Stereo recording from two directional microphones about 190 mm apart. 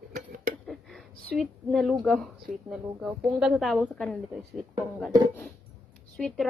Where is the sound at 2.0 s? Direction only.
Centre (ahead or behind).